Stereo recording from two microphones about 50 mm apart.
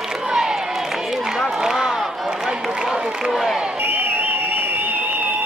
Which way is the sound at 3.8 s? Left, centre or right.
Right.